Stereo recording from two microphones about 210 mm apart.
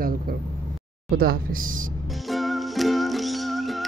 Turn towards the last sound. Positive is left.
turn(degrees=0)  # may be behind; listen again after turning